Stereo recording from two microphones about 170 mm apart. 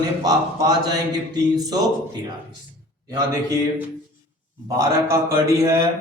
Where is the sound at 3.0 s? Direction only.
20° right (ahead or behind).